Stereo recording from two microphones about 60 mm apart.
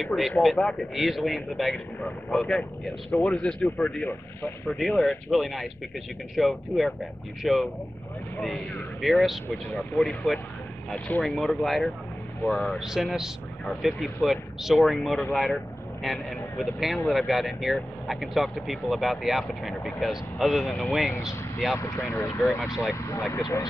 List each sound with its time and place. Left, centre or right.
0.0 s speech: centre
2.0 s speech: centre
4.0 s speech: left
4.6 s speech: centre
9.0 s speech: centre
12.7 s speech: centre
21.7 s speech: left